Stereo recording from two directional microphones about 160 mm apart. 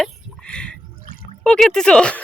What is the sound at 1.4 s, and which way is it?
Speech, 5° left (ahead or behind).